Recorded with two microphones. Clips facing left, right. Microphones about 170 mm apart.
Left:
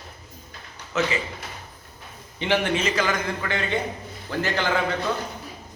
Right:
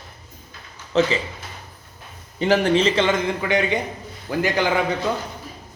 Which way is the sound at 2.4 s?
40° right (ahead or behind).